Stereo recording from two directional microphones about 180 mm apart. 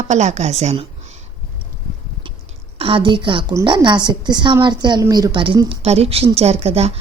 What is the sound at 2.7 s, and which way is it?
A woman's voice, 30° right (ahead or behind).